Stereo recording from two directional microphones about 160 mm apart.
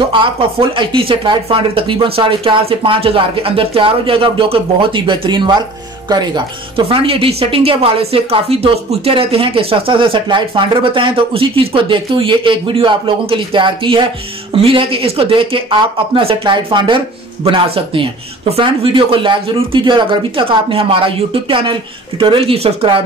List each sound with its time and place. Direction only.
0.1 s a woman's voice: 35° right (ahead or behind)